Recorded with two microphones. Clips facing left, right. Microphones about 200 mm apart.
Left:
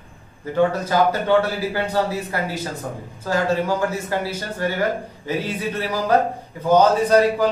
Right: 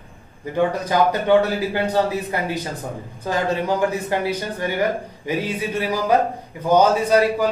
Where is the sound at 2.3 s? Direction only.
20° right (ahead or behind).